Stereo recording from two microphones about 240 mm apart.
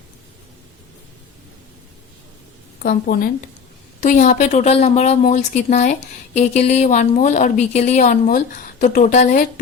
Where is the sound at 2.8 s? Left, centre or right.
Left.